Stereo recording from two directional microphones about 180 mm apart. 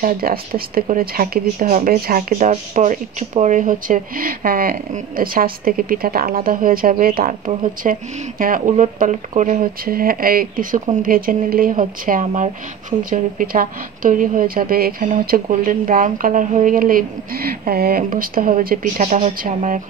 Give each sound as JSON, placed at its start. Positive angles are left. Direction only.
{"t": 0.0, "sound": "speech", "side_deg": -55}